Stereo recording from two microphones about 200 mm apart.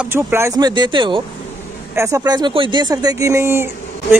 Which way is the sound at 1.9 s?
15° right (ahead or behind).